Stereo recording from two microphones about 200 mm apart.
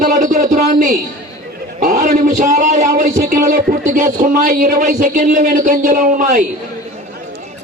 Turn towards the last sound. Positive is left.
turn(degrees=-40)  # may be behind; listen again after turning